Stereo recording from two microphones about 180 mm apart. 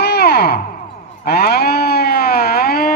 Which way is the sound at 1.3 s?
65° left (ahead or behind).